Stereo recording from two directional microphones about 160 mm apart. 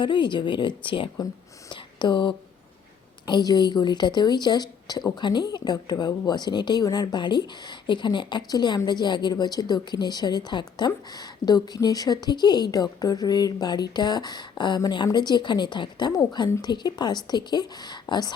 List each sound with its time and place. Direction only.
0.0 s a woman's voice: 30° left (ahead or behind)